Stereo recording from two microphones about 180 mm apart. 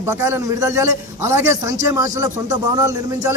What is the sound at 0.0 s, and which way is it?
A man's voice, 15° right (ahead or behind).